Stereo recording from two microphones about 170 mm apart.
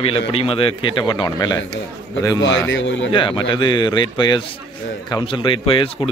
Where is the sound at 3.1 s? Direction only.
30° left (ahead or behind).